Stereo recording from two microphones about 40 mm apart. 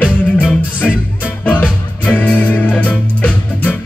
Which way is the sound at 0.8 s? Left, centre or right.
Centre.